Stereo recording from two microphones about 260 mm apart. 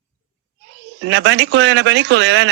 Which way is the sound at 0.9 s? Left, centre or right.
Right.